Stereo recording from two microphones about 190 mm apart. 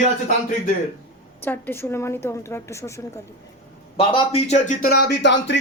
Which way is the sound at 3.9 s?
30° left (ahead or behind).